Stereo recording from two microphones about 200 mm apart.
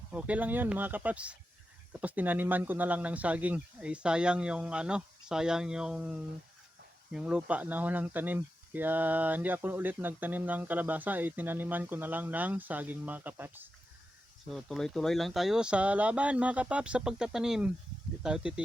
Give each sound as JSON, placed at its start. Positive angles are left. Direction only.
{"t": 0.1, "sound": "speech", "side_deg": -5}
{"t": 14.5, "sound": "speech", "side_deg": 0}